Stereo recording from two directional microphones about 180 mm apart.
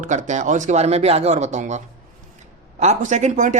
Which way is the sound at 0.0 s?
40° right (ahead or behind).